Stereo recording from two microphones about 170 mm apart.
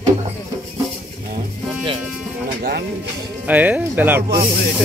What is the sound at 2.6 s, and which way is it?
Speech, 65° right (ahead or behind).